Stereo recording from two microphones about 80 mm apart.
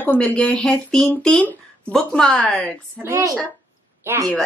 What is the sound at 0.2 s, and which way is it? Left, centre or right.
Speech, centre.